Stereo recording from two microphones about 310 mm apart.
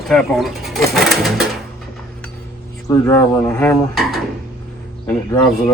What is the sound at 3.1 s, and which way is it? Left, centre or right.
Speech, centre.